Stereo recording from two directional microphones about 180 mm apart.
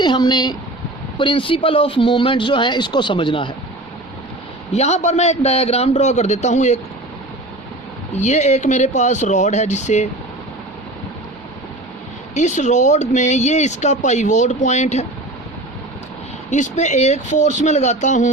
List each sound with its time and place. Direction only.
0.0 s speech: 25° left (ahead or behind)
4.7 s speech: 35° left (ahead or behind)
8.1 s speech: 40° left (ahead or behind)
12.3 s speech: 40° left (ahead or behind)
16.5 s speech: 40° left (ahead or behind)